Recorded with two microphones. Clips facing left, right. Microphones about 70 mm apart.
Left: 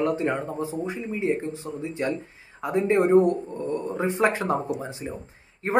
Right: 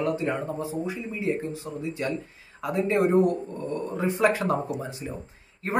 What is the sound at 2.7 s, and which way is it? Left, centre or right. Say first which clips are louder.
Speech: left 3 dB; left.